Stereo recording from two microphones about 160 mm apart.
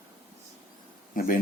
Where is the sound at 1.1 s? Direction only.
65° left (ahead or behind).